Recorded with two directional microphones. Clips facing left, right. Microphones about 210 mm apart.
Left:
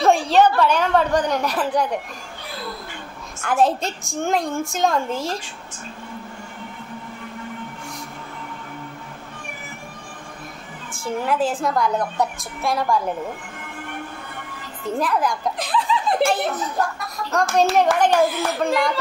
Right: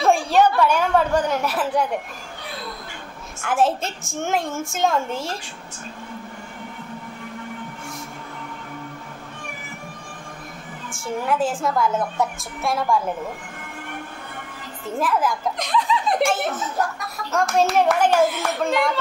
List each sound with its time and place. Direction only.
0.0 s a sound: 10° right (ahead or behind)
0.6 s speech: 10° right (ahead or behind)
3.4 s a child's voice: 5° right (ahead or behind)
10.9 s a woman's voice: centre (ahead or behind)
15.0 s a child's voice: 5° right (ahead or behind)